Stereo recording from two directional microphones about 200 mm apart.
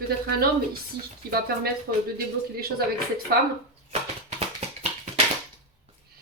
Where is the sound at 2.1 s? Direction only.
50° right (ahead or behind).